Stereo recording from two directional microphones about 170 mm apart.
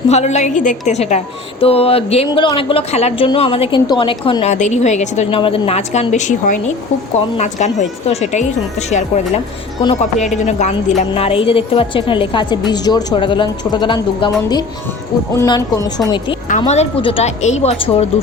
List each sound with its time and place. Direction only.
0.1 s a woman's voice: 40° left (ahead or behind)
4.5 s a woman's voice: 45° left (ahead or behind); by 16.2 s 20° left (ahead or behind)
16.5 s speech: 40° left (ahead or behind)